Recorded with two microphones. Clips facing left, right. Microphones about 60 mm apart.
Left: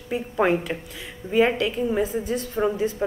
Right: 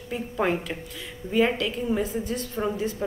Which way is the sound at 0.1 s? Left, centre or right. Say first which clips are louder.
Left 4 dB; centre.